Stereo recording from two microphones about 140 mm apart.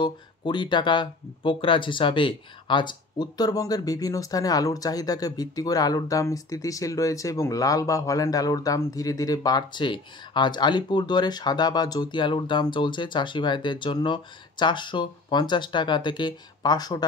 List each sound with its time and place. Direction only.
0.0 s speech: 35° left (ahead or behind)